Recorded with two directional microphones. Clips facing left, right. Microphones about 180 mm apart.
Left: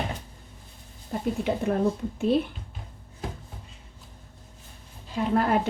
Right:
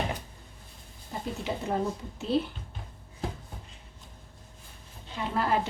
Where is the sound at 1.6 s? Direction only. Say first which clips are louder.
Left 5 dB; 60° left (ahead or behind).